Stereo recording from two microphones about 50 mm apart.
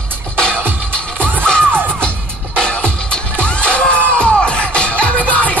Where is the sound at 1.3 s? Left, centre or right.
Right.